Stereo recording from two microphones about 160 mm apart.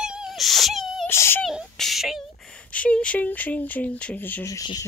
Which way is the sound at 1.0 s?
15° left (ahead or behind).